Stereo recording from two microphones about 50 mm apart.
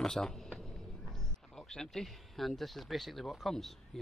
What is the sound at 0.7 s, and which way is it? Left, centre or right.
A man's voice, centre.